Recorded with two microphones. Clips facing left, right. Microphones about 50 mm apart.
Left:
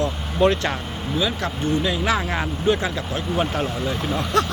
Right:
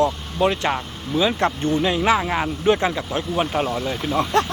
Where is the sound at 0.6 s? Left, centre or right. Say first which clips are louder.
Right 2 dB; centre.